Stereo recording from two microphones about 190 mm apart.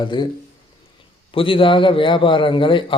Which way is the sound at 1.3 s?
30° left (ahead or behind).